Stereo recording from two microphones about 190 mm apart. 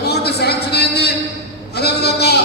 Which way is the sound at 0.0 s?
60° left (ahead or behind).